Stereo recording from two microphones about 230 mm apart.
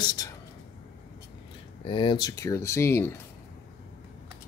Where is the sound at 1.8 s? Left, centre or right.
Centre.